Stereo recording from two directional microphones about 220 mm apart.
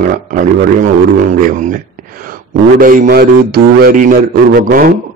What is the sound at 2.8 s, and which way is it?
A man's voice, 40° right (ahead or behind).